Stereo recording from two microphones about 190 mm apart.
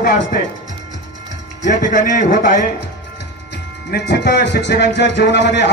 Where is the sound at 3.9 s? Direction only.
60° left (ahead or behind).